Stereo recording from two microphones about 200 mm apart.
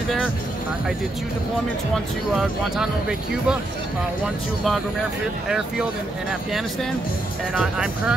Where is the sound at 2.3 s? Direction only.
5° right (ahead or behind).